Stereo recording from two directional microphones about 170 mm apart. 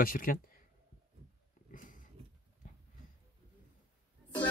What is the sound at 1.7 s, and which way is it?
Dog, 50° left (ahead or behind).